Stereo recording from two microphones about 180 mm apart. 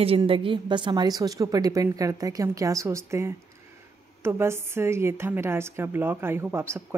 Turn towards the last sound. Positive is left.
turn(degrees=-15)  # may be behind; listen again after turning